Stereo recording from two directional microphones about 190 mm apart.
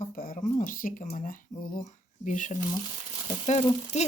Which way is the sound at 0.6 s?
45° left (ahead or behind).